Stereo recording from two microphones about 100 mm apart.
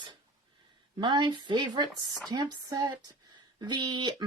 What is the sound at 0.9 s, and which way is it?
Speech, 50° right (ahead or behind).